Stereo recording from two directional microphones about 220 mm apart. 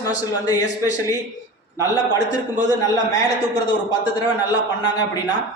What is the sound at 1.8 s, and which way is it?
A man's voice, 15° left (ahead or behind).